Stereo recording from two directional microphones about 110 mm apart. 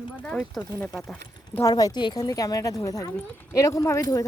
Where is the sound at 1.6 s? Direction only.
35° left (ahead or behind).